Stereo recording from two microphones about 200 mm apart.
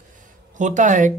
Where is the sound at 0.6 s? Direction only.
40° right (ahead or behind).